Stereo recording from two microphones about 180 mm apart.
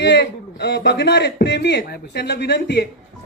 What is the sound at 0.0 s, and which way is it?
A woman's voice, 75° left (ahead or behind).